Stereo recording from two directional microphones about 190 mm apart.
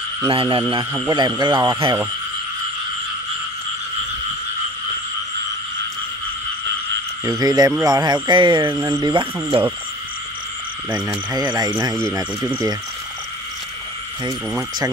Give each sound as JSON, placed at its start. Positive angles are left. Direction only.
{"t": 0.2, "sound": "speech", "side_deg": -30}
{"t": 7.2, "sound": "speech", "side_deg": -20}
{"t": 11.1, "sound": "speech", "side_deg": -20}